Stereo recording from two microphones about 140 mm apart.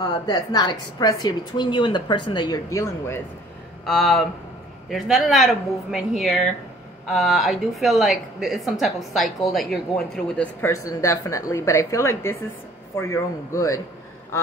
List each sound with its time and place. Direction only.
0.0 s a woman's voice: 30° left (ahead or behind)
3.8 s a woman's voice: 5° left (ahead or behind)
10.6 s a woman's voice: 20° left (ahead or behind)